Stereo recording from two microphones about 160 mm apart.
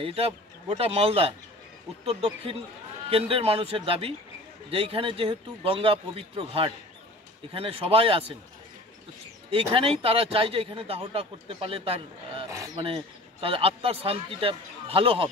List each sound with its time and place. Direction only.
0.0 s speech: 35° right (ahead or behind)
9.5 s speech: 35° right (ahead or behind)
12.4 s a sound: 20° right (ahead or behind)
12.7 s speech: 35° right (ahead or behind)